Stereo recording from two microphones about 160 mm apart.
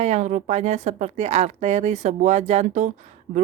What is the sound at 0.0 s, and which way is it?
Speech, 45° right (ahead or behind).